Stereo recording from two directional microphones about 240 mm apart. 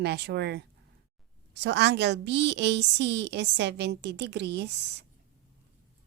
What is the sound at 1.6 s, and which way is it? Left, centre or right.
A woman's voice, right.